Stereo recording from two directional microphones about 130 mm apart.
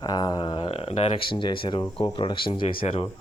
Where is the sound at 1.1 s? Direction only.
40° left (ahead or behind).